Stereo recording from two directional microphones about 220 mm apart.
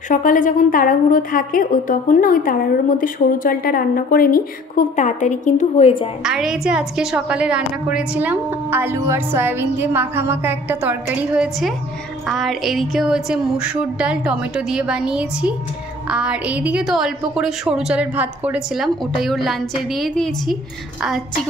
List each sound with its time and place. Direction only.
0.1 s a woman's voice: 35° left (ahead or behind)
6.2 s a woman's voice: centre (ahead or behind)